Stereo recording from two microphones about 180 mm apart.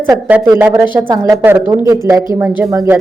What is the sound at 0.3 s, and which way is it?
A woman's voice, 5° right (ahead or behind).